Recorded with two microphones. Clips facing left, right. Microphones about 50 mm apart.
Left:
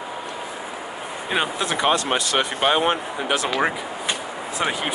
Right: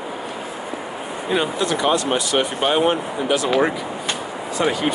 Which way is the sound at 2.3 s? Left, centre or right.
Left.